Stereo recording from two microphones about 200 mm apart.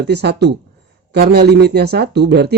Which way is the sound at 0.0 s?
55° right (ahead or behind).